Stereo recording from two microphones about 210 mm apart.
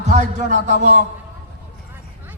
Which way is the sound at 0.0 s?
35° right (ahead or behind).